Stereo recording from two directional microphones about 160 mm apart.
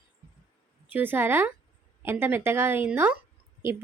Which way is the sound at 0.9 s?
10° right (ahead or behind).